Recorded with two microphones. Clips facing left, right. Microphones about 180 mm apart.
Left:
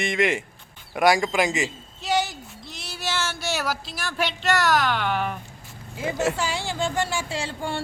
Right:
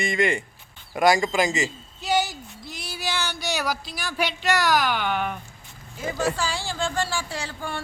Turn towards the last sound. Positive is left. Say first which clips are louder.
# left 3 dB
turn(degrees=25)  # may be behind; listen again after turning